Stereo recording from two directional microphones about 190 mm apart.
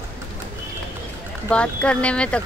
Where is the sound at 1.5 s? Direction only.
5° left (ahead or behind).